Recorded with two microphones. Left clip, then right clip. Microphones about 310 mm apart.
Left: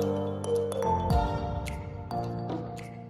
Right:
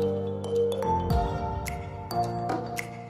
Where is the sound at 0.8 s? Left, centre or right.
Centre.